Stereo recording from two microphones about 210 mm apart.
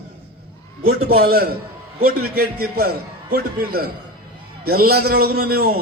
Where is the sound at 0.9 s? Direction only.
45° right (ahead or behind).